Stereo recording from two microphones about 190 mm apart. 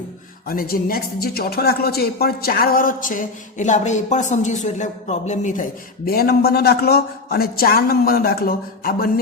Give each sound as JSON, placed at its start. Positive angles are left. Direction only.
{"t": 0.4, "sound": "speech", "side_deg": 50}
{"t": 6.1, "sound": "speech", "side_deg": 55}